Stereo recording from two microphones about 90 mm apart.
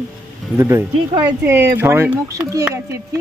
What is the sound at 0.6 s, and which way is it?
Speech, 30° right (ahead or behind).